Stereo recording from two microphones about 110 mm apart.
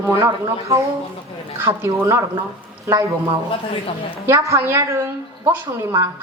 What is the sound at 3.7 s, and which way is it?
Speech, 55° left (ahead or behind).